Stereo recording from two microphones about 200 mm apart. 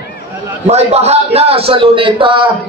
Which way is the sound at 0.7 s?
30° right (ahead or behind).